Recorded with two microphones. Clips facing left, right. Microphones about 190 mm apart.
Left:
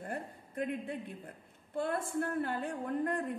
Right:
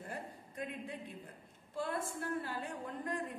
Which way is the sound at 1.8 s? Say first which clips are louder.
Left 5 dB; 55° left (ahead or behind).